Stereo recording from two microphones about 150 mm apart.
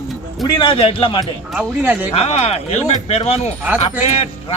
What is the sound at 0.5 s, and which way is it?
Speech, 35° left (ahead or behind).